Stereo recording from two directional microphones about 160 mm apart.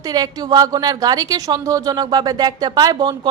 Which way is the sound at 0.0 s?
25° right (ahead or behind).